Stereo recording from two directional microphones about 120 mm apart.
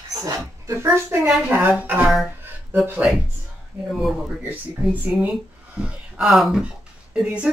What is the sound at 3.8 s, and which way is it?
Speech, centre (ahead or behind).